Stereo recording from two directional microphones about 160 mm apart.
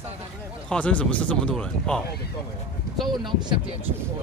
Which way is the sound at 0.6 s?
5° left (ahead or behind).